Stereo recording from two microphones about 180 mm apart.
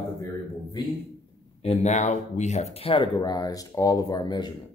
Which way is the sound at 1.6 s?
40° left (ahead or behind).